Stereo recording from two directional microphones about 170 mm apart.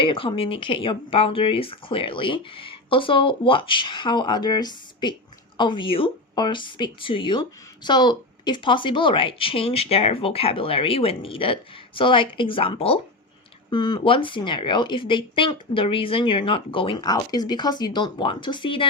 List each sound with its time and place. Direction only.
0.0 s speech: 30° left (ahead or behind)